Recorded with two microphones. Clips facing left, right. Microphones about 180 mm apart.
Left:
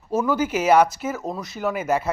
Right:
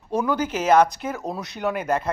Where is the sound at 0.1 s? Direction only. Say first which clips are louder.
Left 2 dB; 5° left (ahead or behind).